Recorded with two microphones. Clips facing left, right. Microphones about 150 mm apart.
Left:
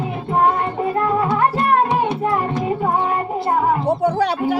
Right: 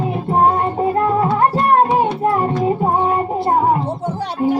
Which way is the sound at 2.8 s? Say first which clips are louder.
Right 3 dB; 30° right (ahead or behind).